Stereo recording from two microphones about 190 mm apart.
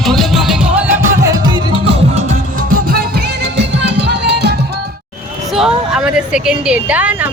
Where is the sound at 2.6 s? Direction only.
45° right (ahead or behind); by 4.5 s 65° right (ahead or behind).